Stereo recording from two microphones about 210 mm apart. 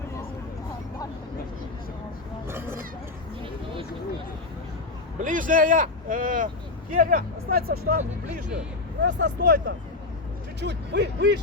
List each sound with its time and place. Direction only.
2.5 s a sound: 10° right (ahead or behind)
5.2 s speech: 40° right (ahead or behind)
9.0 s speech: 55° right (ahead or behind)